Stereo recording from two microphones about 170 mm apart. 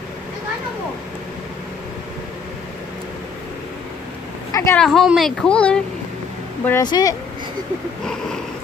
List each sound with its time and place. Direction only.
4.5 s a sound: 20° left (ahead or behind)
4.7 s a woman's voice: centre (ahead or behind)
6.7 s speech: 25° left (ahead or behind)
8.0 s a woman's voice: 5° left (ahead or behind)